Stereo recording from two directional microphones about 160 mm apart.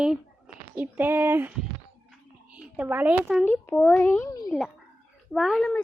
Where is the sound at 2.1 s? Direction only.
5° right (ahead or behind).